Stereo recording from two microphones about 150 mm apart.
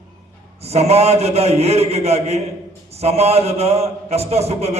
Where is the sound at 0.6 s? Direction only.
45° right (ahead or behind).